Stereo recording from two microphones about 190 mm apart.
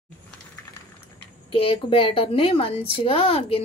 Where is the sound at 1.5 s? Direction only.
25° left (ahead or behind).